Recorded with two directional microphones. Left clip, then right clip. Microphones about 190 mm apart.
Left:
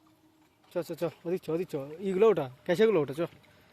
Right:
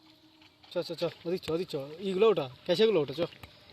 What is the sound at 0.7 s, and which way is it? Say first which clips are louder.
Speech: even; 20° left (ahead or behind).